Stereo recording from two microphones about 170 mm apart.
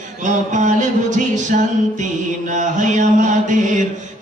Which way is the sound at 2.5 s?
45° right (ahead or behind).